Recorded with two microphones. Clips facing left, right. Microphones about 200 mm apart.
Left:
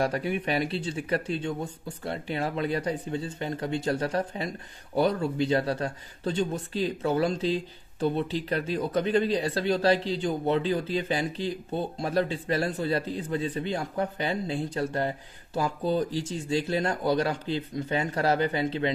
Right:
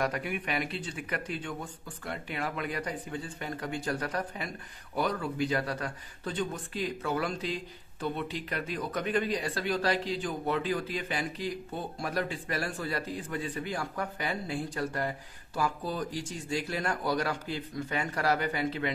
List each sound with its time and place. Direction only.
0.0 s speech: 30° left (ahead or behind)